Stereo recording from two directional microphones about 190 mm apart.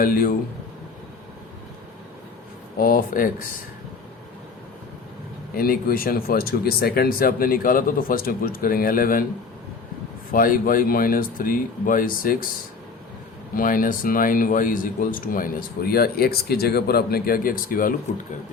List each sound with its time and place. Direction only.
0.0 s speech: 50° left (ahead or behind)
2.7 s speech: 50° left (ahead or behind)
5.5 s speech: 50° left (ahead or behind)
10.3 s speech: 45° left (ahead or behind)
13.6 s speech: 45° left (ahead or behind)